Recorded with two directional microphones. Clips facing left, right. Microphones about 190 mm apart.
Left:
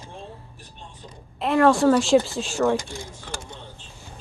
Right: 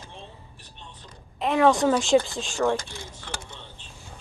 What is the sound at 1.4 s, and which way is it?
Speech, centre (ahead or behind).